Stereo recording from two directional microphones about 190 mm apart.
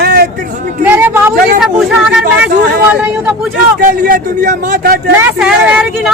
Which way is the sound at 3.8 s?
45° right (ahead or behind).